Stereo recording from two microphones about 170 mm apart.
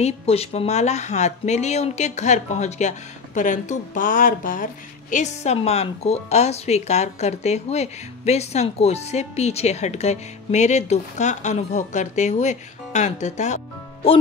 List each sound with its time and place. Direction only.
0.0 s a woman's voice: 35° left (ahead or behind); by 4.6 s 55° left (ahead or behind)
5.1 s a woman's voice: 40° left (ahead or behind)